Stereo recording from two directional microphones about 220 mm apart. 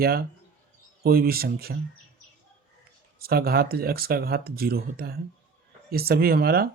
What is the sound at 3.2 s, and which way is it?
Speech, 45° right (ahead or behind).